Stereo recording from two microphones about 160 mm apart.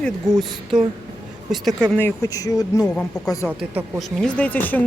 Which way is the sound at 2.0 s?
20° left (ahead or behind).